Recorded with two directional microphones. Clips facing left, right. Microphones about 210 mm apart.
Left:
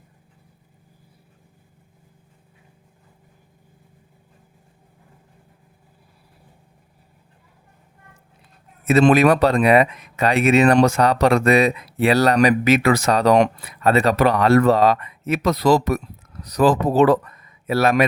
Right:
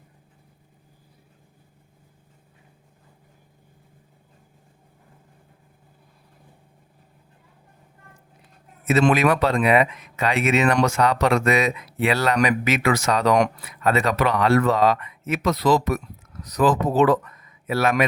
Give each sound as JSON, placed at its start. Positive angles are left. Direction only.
{"t": 8.9, "sound": "speech", "side_deg": 35}